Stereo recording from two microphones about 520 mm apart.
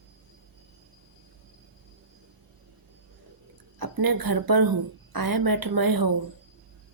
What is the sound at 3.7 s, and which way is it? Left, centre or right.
A woman's voice, right.